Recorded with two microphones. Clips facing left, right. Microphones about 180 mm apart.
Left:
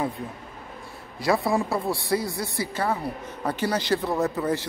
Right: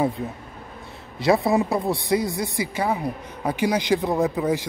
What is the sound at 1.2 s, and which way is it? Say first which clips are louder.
A woman's voice: right 4 dB; 20° right (ahead or behind).